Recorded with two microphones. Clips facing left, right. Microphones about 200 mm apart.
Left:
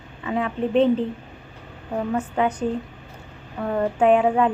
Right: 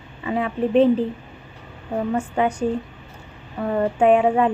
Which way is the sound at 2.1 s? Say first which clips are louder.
Even; 10° right (ahead or behind).